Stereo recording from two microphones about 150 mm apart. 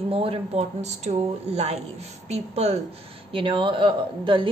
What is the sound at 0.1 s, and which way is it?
A woman's voice, 40° right (ahead or behind).